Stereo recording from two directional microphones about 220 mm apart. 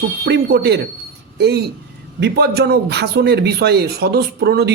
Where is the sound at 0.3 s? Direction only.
45° right (ahead or behind).